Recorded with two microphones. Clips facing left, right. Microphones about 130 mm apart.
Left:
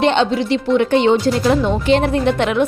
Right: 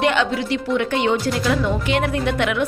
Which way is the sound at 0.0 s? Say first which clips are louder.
Left 4 dB; 30° left (ahead or behind).